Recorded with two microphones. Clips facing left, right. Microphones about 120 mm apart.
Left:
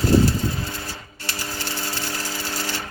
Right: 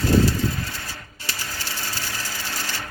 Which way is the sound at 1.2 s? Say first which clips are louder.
Left 1 dB; 40° left (ahead or behind).